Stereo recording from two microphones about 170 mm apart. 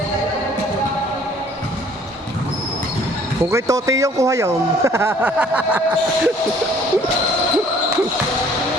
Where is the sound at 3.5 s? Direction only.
20° right (ahead or behind).